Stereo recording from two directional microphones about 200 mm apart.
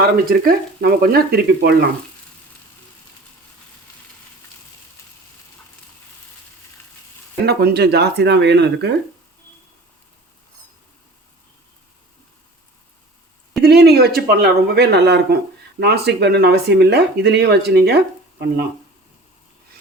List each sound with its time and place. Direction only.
0.0 s speech: 50° right (ahead or behind)
7.4 s speech: 55° right (ahead or behind)
13.6 s speech: 55° right (ahead or behind)